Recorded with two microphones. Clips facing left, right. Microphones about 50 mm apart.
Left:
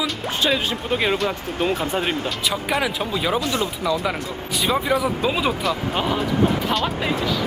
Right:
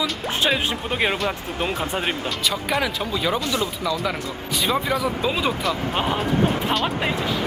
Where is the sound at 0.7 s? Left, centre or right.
Centre.